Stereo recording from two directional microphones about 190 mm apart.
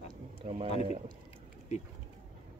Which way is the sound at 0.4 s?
35° right (ahead or behind).